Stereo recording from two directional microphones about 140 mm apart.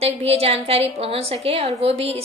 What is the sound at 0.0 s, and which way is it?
A woman's voice, 45° right (ahead or behind).